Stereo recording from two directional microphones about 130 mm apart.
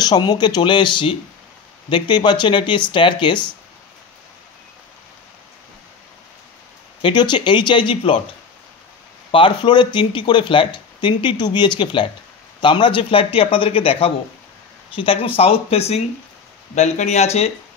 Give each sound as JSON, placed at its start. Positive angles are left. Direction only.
{"t": 0.0, "sound": "speech", "side_deg": 30}
{"t": 7.0, "sound": "speech", "side_deg": 35}
{"t": 9.3, "sound": "speech", "side_deg": 40}